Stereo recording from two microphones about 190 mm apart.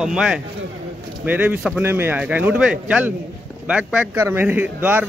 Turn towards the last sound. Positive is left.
turn(degrees=-10)  # may be behind; listen again after turning